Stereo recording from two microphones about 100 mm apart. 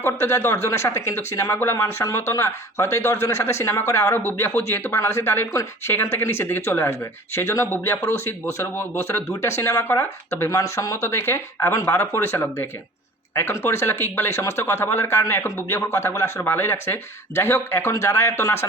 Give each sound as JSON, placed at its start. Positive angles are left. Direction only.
{"t": 0.0, "sound": "speech", "side_deg": 25}